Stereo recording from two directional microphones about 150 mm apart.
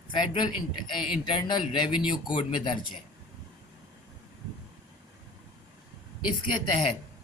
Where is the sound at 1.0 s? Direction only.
5° right (ahead or behind).